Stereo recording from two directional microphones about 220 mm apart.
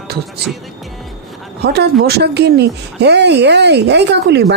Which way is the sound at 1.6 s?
45° right (ahead or behind).